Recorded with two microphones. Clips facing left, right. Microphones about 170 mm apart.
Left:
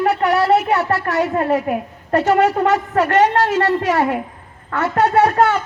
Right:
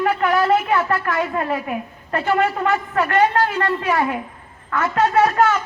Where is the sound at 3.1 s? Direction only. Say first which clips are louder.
Left 2 dB; 75° left (ahead or behind).